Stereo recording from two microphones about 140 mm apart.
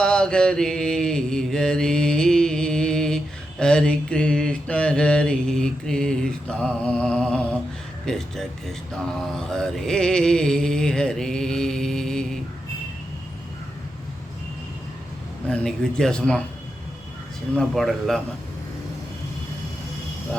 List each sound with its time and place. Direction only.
0.0 s mantra: 5° left (ahead or behind)
15.4 s mantra: 5° left (ahead or behind)
17.5 s mantra: 5° left (ahead or behind)